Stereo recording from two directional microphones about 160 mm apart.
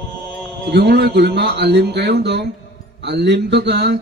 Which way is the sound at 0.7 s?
90° right.